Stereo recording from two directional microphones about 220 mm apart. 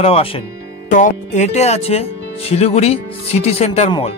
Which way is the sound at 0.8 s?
35° left (ahead or behind).